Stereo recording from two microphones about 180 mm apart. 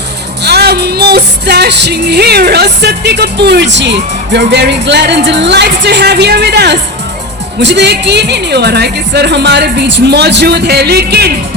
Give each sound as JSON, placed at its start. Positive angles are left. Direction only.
{"t": 0.4, "sound": "music", "side_deg": -65}